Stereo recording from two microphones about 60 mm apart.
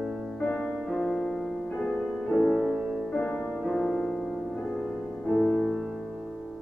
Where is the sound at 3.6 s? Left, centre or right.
Centre.